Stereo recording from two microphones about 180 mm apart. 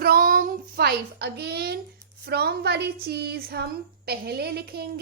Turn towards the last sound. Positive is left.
turn(degrees=-60)  # may be behind; listen again after turning